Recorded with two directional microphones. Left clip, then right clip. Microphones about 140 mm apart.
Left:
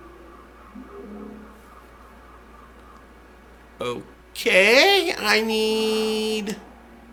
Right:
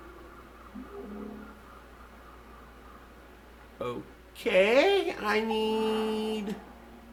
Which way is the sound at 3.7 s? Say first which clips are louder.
Left 7 dB; 15° left (ahead or behind).